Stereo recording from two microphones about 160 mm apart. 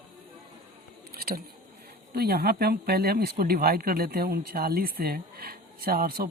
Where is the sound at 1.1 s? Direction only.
70° right (ahead or behind).